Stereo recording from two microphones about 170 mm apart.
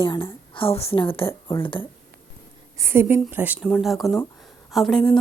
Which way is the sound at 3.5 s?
5° left (ahead or behind).